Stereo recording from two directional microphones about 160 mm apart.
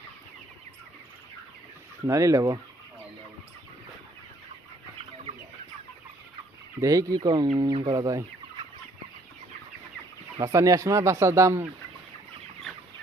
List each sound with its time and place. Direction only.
2.0 s speech: 20° right (ahead or behind)
5.3 s chicken: 45° right (ahead or behind)
6.7 s speech: 20° right (ahead or behind)
10.4 s speech: 20° right (ahead or behind)